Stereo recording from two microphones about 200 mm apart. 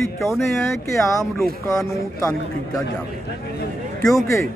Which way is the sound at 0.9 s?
15° left (ahead or behind).